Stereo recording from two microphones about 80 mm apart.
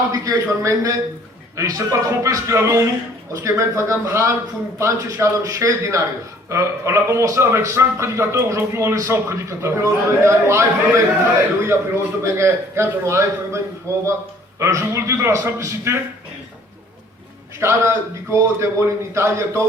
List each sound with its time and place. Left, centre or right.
0.1 s a man's voice: right
17.6 s a man's voice: right